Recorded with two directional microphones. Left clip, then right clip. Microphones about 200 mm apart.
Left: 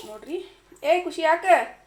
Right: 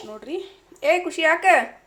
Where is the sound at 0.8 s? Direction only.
15° right (ahead or behind).